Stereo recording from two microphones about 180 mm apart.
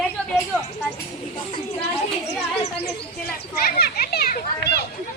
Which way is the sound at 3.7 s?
60° left (ahead or behind).